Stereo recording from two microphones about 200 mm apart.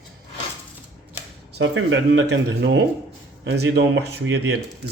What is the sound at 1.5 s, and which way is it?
Speech, 70° right (ahead or behind).